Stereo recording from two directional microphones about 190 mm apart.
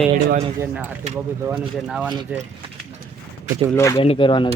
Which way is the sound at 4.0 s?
30° left (ahead or behind).